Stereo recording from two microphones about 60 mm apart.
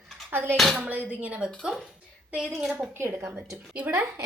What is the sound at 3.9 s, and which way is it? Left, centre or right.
Speech, right.